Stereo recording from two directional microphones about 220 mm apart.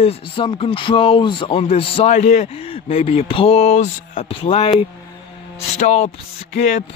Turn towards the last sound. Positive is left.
turn(degrees=30)  # may be behind; listen again after turning